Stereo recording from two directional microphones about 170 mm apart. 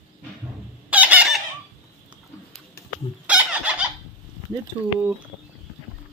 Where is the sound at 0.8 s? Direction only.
10° right (ahead or behind).